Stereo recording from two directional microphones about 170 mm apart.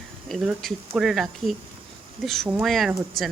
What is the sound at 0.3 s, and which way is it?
Speech, centre (ahead or behind).